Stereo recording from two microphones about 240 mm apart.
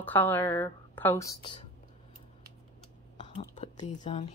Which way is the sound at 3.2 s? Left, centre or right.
Left.